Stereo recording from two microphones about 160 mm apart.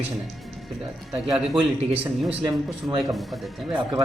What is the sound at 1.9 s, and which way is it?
Speech, 10° right (ahead or behind).